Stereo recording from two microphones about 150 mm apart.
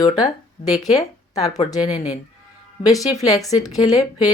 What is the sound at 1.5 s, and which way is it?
Speech, 45° left (ahead or behind).